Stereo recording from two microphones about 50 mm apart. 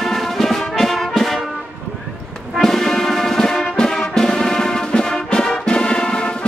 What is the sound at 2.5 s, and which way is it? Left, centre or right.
Music, centre.